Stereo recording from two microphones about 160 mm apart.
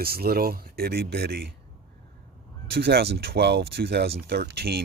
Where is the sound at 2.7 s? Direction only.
85° right.